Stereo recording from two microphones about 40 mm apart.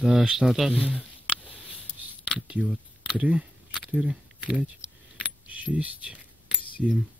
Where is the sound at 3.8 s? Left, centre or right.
Centre.